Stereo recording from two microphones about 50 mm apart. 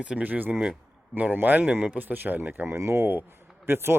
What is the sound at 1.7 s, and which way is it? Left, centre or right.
Speech, right.